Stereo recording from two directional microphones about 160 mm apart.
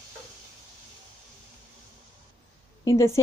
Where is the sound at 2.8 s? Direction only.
20° left (ahead or behind).